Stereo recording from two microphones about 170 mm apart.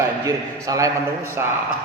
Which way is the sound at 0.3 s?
20° right (ahead or behind).